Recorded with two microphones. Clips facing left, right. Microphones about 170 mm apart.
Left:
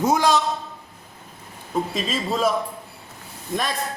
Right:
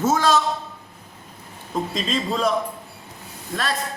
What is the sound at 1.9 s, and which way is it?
Speech, 5° left (ahead or behind).